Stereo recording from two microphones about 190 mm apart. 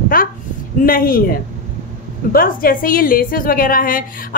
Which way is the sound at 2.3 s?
50° left (ahead or behind).